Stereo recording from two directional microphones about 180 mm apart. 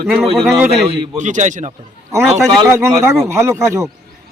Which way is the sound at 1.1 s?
40° right (ahead or behind).